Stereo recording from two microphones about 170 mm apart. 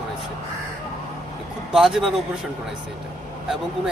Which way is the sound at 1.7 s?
Centre (ahead or behind).